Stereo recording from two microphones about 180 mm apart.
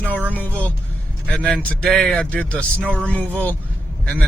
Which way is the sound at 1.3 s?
5° left (ahead or behind).